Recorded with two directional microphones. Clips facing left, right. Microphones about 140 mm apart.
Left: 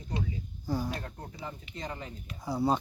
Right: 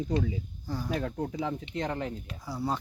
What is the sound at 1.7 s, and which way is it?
Speech, 70° right (ahead or behind).